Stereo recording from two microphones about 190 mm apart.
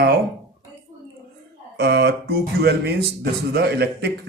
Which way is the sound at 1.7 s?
60° right (ahead or behind).